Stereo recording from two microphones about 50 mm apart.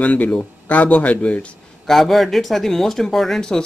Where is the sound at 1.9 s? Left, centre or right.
Centre.